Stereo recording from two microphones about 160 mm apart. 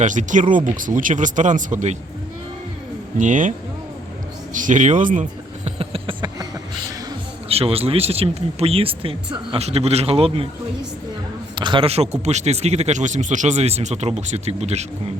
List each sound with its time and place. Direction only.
0.0 s a man's voice: 50° right (ahead or behind)
3.2 s a man's voice: 55° right (ahead or behind)
4.5 s a man's voice: 55° right (ahead or behind)
5.6 s a sound: 35° right (ahead or behind)
7.4 s speech: 40° right (ahead or behind)
11.5 s a man's voice: 30° right (ahead or behind)